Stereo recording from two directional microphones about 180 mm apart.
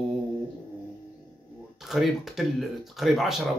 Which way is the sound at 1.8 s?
Centre (ahead or behind).